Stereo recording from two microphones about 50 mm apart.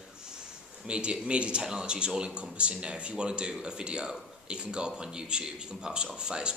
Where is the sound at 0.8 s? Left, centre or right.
Right.